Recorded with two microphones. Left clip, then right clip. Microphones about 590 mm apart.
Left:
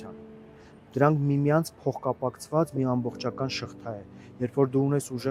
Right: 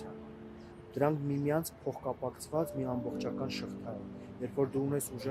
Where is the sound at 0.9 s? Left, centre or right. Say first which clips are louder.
Left 8 dB; left.